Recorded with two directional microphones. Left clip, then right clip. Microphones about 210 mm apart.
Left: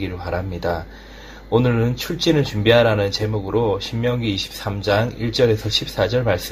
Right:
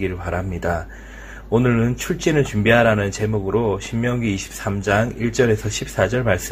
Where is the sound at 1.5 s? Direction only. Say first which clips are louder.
Even; 30° right (ahead or behind).